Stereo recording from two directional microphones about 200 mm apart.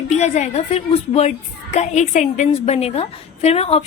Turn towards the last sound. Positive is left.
turn(degrees=30)  # may be behind; listen again after turning